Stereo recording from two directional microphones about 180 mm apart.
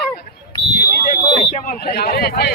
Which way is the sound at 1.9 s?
60° left (ahead or behind).